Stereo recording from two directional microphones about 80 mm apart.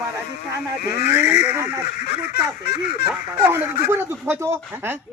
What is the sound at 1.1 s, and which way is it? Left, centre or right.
Speech, right.